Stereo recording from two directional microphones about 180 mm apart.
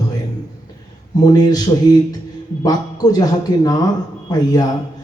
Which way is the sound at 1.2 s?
20° left (ahead or behind).